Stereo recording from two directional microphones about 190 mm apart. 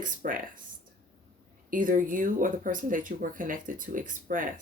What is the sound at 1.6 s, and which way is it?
Speech, 45° right (ahead or behind).